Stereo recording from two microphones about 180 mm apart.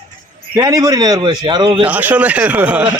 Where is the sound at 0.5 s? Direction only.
20° right (ahead or behind).